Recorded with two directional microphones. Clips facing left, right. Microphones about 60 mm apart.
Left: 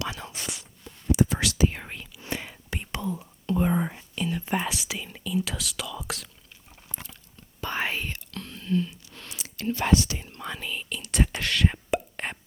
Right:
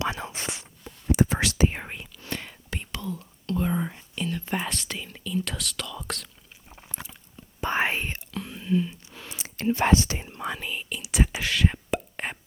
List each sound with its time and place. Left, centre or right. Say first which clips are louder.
0.0 s whispering: right 4 dB; right
1.8 s whispering: right 2 dB; centre
2.2 s whispering: left 2 dB; centre
6.7 s chewing: right 2 dB; centre
7.6 s whispering: right 4 dB; right
8.3 s whispering: right 2 dB; centre
9.3 s whispering: right 4 dB; right
10.2 s whispering: right 3 dB; centre
12.1 s plop: right 1 dB; centre